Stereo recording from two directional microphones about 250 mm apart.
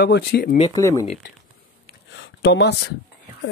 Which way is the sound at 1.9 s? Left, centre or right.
Left.